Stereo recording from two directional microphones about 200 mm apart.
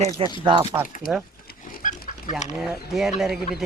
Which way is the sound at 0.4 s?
20° right (ahead or behind).